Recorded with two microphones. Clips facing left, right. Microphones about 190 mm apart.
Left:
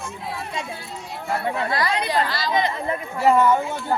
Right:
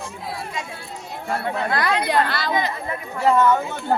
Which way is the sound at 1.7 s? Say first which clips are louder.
Right 4 dB; 55° right (ahead or behind).